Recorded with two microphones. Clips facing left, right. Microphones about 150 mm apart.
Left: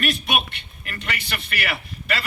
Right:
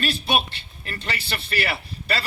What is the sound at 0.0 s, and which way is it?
A man's voice, 30° right (ahead or behind).